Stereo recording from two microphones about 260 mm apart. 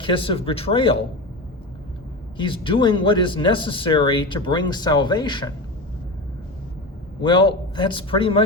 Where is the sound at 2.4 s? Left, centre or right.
Centre.